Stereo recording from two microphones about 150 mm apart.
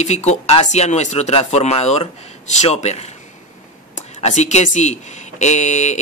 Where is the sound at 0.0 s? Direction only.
50° left (ahead or behind).